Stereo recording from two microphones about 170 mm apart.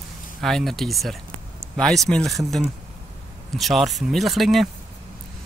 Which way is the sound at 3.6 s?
Centre (ahead or behind).